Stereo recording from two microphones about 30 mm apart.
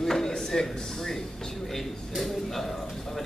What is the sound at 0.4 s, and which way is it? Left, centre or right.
A man's voice, centre.